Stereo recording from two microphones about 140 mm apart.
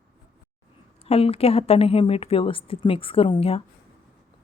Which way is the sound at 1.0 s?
45° left (ahead or behind).